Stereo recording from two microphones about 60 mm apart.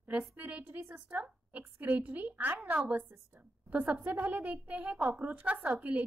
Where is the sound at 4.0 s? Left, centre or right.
Right.